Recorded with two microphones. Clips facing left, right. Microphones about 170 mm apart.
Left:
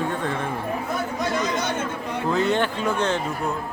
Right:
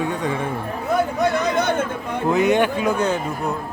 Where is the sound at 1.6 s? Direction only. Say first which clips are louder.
Right 6 dB; 55° right (ahead or behind).